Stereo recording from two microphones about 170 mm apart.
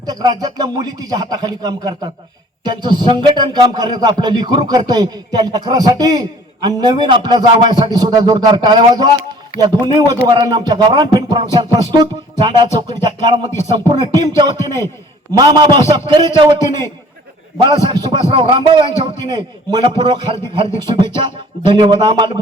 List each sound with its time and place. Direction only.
0.0 s speech: 25° right (ahead or behind)
17.6 s speech: 25° right (ahead or behind)